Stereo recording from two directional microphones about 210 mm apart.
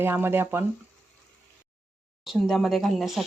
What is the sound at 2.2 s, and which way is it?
Speech, centre (ahead or behind).